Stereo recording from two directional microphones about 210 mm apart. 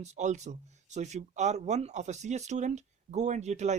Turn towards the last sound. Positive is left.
turn(degrees=-35)  # may be behind; listen again after turning